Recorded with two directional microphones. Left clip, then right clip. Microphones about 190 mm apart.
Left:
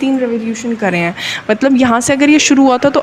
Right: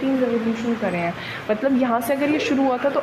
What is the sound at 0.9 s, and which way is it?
Speech, 40° left (ahead or behind).